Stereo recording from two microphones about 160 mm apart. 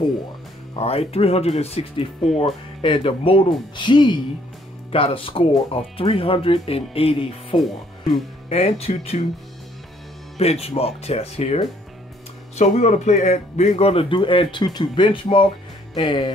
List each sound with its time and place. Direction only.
0.7 s a man's voice: 40° left (ahead or behind)
10.3 s a man's voice: 40° left (ahead or behind)